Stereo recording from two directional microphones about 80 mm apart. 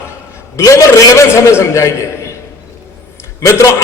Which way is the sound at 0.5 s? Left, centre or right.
Left.